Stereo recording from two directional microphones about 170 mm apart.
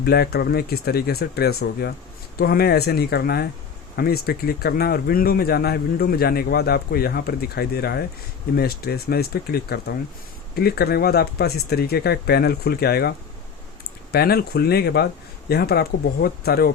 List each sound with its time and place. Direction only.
0.0 s speech: 70° left (ahead or behind)